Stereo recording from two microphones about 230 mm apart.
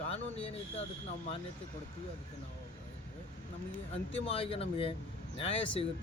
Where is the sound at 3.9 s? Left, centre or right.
Left.